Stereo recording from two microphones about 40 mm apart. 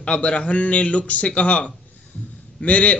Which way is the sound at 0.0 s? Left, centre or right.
Left.